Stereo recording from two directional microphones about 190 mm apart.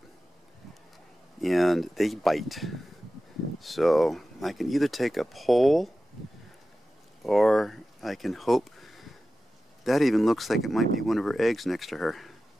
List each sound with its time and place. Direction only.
1.4 s speech: centre (ahead or behind)
7.2 s speech: centre (ahead or behind)